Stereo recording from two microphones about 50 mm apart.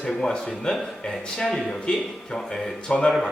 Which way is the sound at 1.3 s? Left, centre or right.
Centre.